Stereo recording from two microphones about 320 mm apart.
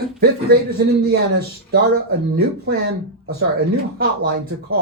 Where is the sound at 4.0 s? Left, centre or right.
Right.